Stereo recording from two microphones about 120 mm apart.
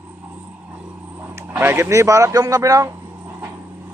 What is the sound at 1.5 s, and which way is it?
Speech, 20° right (ahead or behind).